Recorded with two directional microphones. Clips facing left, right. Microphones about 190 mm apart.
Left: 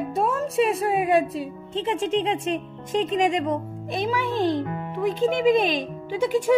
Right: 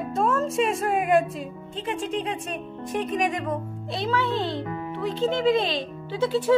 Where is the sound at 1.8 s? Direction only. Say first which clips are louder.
Left 4 dB; 25° left (ahead or behind).